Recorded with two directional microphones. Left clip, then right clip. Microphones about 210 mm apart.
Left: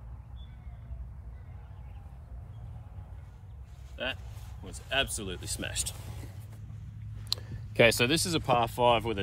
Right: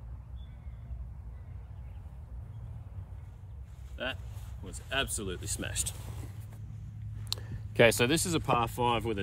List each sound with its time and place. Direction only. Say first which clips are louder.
3.9 s speech: left 2 dB; 10° right (ahead or behind)
7.2 s speech: left 4 dB; 25° right (ahead or behind); by 9.2 s 5° right (ahead or behind)